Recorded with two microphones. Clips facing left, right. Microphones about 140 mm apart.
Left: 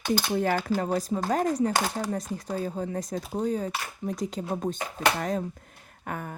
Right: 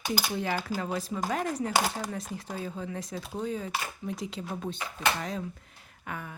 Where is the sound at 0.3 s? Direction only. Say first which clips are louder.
Left 6 dB; 45° left (ahead or behind).